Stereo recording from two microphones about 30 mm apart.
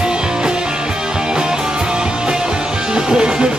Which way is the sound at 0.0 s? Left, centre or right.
Right.